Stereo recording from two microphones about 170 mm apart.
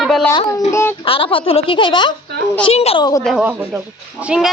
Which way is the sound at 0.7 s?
15° left (ahead or behind).